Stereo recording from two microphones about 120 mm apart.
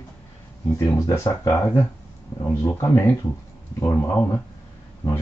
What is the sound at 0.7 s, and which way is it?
Speech, 25° left (ahead or behind).